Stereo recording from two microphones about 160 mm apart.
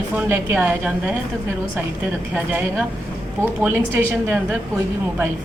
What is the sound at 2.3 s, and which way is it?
Speech, 10° right (ahead or behind).